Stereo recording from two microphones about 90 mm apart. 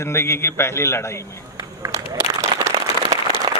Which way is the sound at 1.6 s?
45° right (ahead or behind).